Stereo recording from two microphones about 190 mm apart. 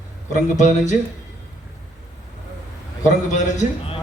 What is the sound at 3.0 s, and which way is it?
Speech, 40° left (ahead or behind).